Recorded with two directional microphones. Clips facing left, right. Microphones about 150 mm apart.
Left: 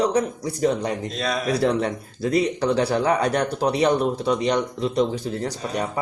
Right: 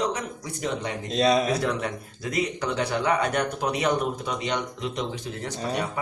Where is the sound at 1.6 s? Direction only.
35° left (ahead or behind).